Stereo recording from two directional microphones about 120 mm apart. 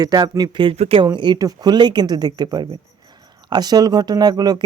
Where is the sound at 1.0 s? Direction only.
40° right (ahead or behind).